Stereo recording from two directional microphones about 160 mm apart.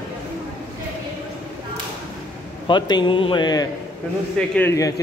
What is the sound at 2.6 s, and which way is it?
A man's voice, 30° left (ahead or behind).